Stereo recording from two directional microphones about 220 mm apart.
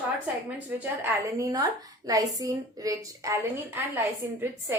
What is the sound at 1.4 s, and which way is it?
A woman's voice, 15° right (ahead or behind).